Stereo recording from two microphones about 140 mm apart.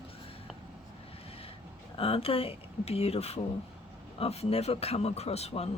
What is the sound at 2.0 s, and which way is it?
Speech, 40° left (ahead or behind).